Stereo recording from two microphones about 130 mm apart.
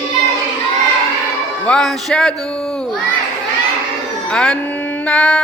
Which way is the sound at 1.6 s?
5° left (ahead or behind).